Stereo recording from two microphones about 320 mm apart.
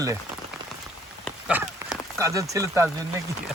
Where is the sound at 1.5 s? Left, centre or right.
Centre.